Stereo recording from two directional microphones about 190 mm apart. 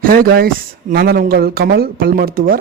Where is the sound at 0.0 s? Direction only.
50° right (ahead or behind).